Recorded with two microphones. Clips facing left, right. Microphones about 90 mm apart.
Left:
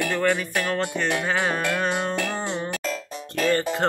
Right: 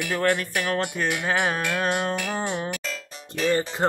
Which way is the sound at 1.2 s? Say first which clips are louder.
Even; 10° right (ahead or behind).